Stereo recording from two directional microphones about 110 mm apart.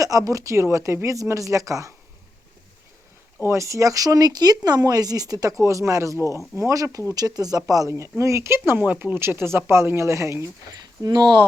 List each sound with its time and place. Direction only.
0.0 s speech: 30° right (ahead or behind)
3.5 s speech: 30° right (ahead or behind)
6.1 s speech: 30° left (ahead or behind)
6.6 s speech: 25° right (ahead or behind)
11.0 s speech: 40° right (ahead or behind)